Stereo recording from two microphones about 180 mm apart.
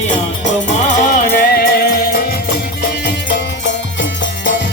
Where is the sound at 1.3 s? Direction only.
60° left (ahead or behind).